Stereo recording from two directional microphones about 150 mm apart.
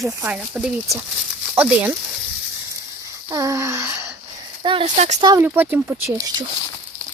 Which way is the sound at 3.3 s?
20° right (ahead or behind).